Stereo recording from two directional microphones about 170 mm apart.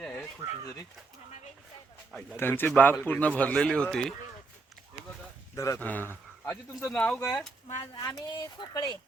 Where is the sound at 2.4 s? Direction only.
10° left (ahead or behind).